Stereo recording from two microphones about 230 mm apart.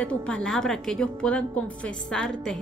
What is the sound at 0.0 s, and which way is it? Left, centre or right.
Speech, centre.